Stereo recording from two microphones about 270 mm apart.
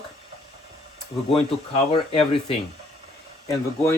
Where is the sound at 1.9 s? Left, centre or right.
Left.